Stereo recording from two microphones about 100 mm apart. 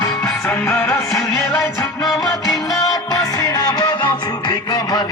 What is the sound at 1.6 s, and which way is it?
Music, 35° left (ahead or behind).